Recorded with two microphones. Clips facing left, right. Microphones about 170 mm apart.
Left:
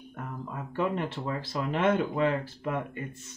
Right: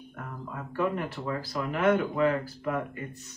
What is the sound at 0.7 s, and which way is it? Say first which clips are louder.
Speech: even; 25° left (ahead or behind).